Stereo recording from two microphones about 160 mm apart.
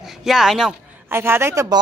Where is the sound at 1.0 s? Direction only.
15° right (ahead or behind).